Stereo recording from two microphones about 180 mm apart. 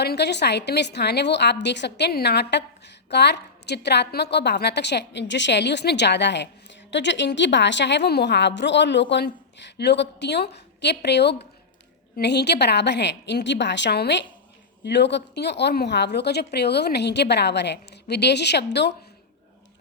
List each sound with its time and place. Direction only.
0.0 s a woman's voice: 65° left (ahead or behind)